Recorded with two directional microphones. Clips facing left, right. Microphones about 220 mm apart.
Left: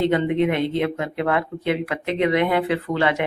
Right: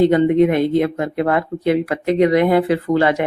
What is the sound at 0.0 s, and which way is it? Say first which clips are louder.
A man's voice: right 7 dB; 40° right (ahead or behind).